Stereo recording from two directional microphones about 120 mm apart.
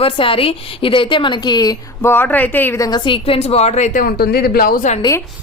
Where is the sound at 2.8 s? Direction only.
40° left (ahead or behind); by 5.0 s 70° left (ahead or behind).